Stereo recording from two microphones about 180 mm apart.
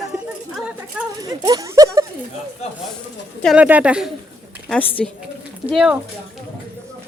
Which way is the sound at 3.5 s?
10° right (ahead or behind).